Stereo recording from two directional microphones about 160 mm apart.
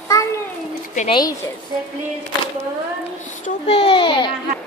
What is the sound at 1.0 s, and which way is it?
Speech, 30° left (ahead or behind).